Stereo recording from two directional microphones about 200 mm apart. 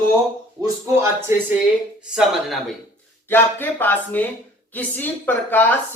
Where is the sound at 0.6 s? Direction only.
15° right (ahead or behind).